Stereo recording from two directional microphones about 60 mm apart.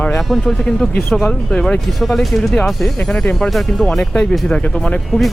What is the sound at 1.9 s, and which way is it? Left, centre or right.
Speech, centre.